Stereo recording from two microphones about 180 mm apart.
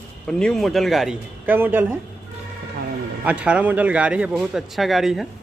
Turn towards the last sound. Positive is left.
turn(degrees=0)  # may be behind; listen again after turning